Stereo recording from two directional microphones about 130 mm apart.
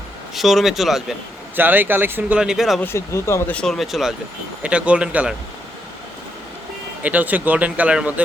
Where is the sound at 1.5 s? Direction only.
15° right (ahead or behind).